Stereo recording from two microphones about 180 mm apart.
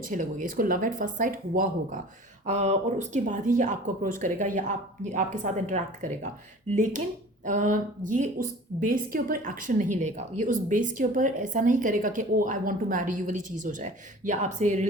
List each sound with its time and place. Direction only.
0.0 s a woman's voice: 45° right (ahead or behind)
2.5 s a woman's voice: 40° right (ahead or behind)